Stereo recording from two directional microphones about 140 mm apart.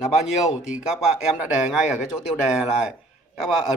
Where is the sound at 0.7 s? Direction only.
10° right (ahead or behind).